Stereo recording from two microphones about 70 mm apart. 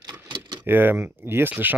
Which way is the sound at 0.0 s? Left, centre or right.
Right.